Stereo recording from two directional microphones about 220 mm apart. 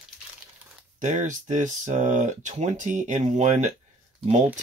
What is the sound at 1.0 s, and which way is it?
Speech, 35° right (ahead or behind).